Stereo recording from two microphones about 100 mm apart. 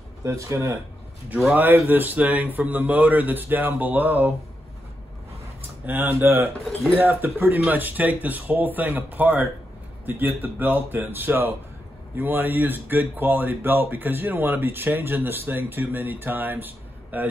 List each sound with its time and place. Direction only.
0.2 s speech: 30° right (ahead or behind)
1.5 s a man's voice: 20° right (ahead or behind)
5.9 s a man's voice: 20° right (ahead or behind)